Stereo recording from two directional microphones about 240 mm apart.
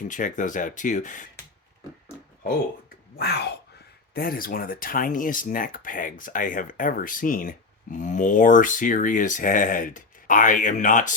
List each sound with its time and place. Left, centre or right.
0.1 s speech: left
3.2 s speech: left